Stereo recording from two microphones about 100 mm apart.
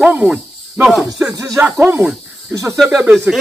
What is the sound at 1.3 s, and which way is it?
Speech, 30° right (ahead or behind).